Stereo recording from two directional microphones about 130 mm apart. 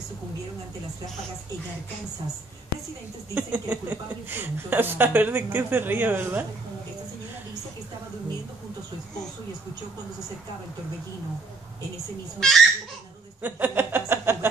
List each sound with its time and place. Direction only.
3.3 s a woman's voice: 10° right (ahead or behind)
12.4 s speech: 5° left (ahead or behind)
13.4 s a sound: 15° right (ahead or behind)